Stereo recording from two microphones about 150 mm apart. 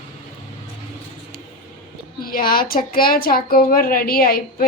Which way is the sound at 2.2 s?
75° left (ahead or behind).